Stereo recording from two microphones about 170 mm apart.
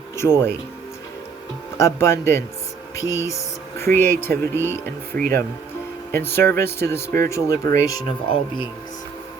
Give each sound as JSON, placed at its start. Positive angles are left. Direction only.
{"t": 0.2, "sound": "speech", "side_deg": 15}
{"t": 1.8, "sound": "speech", "side_deg": 15}
{"t": 6.1, "sound": "speech", "side_deg": 15}
{"t": 8.0, "sound": "speech", "side_deg": 30}